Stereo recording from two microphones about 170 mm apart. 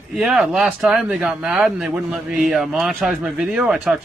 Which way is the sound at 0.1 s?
5° right (ahead or behind).